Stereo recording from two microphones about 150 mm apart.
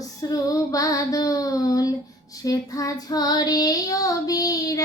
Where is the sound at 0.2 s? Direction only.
25° left (ahead or behind).